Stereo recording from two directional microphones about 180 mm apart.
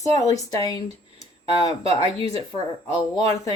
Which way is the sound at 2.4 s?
25° left (ahead or behind).